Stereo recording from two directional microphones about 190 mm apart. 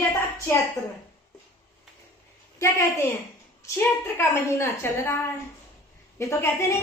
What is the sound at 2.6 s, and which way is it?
Speech, 15° left (ahead or behind).